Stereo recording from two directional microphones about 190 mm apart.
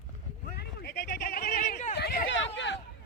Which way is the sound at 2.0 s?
55° left (ahead or behind).